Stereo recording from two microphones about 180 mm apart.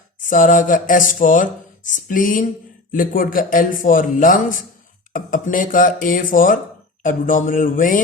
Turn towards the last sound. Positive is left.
turn(degrees=50)  # may be behind; listen again after turning